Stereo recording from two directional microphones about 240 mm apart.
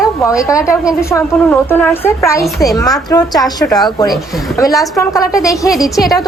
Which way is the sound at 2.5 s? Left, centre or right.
Centre.